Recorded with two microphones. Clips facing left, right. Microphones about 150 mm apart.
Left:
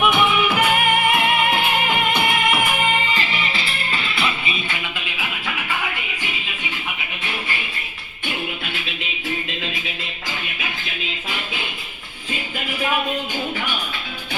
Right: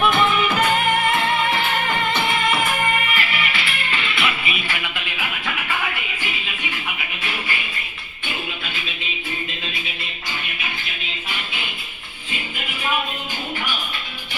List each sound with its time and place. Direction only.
0.0 s music: 15° left (ahead or behind)
3.0 s music: 25° left (ahead or behind)